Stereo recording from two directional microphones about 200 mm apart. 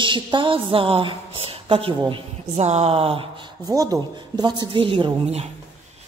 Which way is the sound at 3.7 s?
15° right (ahead or behind).